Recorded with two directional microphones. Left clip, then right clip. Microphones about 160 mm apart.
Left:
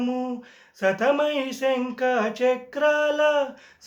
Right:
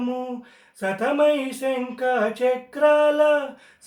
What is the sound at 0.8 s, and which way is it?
Speech, 5° left (ahead or behind).